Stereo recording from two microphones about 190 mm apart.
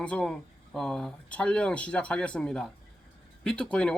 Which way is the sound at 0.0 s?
5° left (ahead or behind).